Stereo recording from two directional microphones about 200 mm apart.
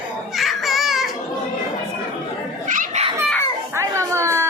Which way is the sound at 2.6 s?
40° right (ahead or behind).